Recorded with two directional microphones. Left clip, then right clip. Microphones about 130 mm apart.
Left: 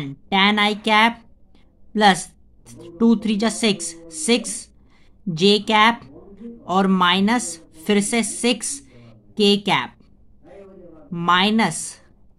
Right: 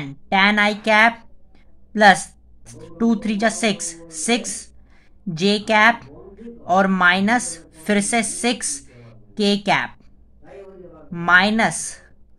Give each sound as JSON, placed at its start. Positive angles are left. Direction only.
{"t": 0.0, "sound": "a woman's voice", "side_deg": 25}
{"t": 11.1, "sound": "a woman's voice", "side_deg": 25}